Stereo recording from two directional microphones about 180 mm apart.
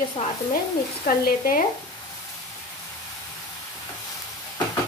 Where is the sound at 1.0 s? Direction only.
55° left (ahead or behind).